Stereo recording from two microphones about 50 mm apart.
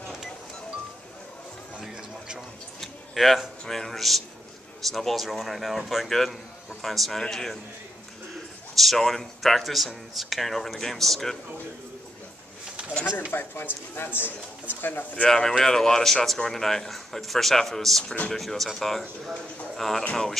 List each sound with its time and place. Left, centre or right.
1.9 s a sound: centre
2.8 s a man's voice: centre
8.7 s a man's voice: centre
13.0 s speech: centre
13.3 s speech: left
15.2 s a man's voice: centre